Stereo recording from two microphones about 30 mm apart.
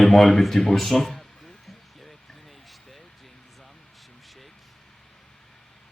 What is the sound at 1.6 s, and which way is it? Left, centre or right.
Basketball bounce, centre.